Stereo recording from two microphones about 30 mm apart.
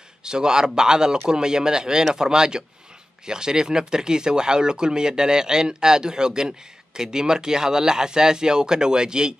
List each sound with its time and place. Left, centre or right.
0.2 s speech: right